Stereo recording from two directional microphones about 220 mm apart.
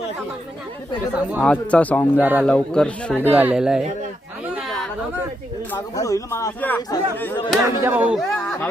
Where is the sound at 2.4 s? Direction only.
5° left (ahead or behind).